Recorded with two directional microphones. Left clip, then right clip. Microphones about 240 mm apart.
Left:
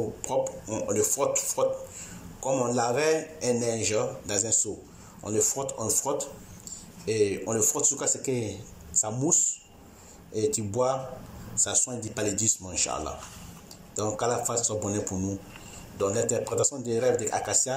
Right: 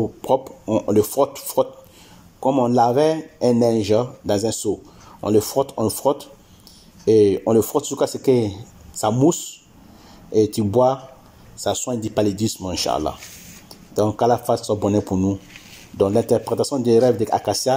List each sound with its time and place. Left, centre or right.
0.2 s a man's voice: right